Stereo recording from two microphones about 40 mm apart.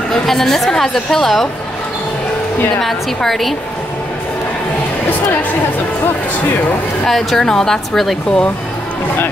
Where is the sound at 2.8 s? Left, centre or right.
Centre.